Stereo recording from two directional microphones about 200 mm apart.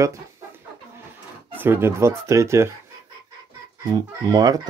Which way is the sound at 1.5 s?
10° right (ahead or behind).